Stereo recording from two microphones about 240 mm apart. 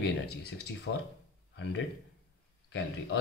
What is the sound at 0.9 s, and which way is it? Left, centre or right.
Speech, left.